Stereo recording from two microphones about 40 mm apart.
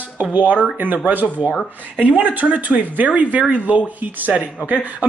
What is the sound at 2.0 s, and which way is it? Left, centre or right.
Speech, right.